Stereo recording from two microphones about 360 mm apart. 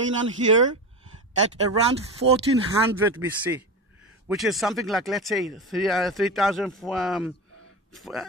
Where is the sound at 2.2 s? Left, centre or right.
Right.